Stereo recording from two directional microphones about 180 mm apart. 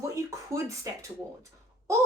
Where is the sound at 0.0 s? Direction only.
15° right (ahead or behind).